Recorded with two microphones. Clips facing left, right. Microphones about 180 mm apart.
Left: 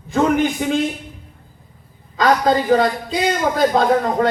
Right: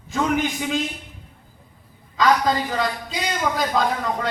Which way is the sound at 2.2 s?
50° left (ahead or behind).